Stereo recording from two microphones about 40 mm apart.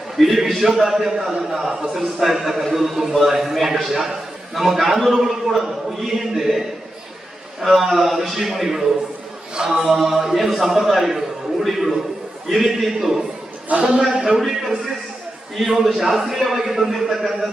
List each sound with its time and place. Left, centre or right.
0.2 s a man's voice: centre
9.6 s a man's voice: centre
9.8 s a man's voice: centre
13.7 s a man's voice: right
14.3 s a man's voice: centre